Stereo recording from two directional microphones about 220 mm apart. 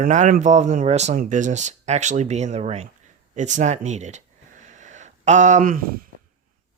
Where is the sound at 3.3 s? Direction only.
35° right (ahead or behind).